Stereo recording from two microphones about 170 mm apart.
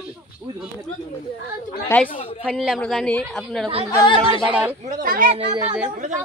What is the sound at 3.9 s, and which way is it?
Speech, 25° left (ahead or behind).